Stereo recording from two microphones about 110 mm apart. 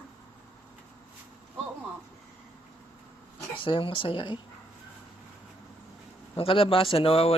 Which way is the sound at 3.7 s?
50° left (ahead or behind).